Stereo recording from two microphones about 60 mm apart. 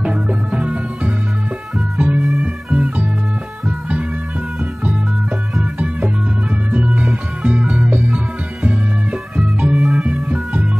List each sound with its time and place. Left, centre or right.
0.0 s music: centre
5.8 s music: right
9.4 s music: right